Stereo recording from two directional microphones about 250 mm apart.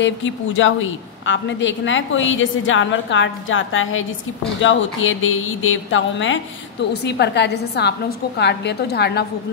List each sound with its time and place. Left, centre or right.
0.0 s a woman's voice: left